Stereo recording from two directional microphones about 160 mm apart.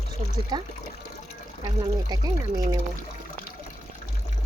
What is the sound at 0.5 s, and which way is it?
Speech, 25° right (ahead or behind).